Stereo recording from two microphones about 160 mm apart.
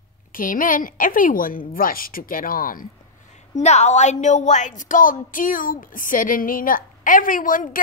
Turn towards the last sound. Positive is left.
turn(degrees=60)  # may be behind; listen again after turning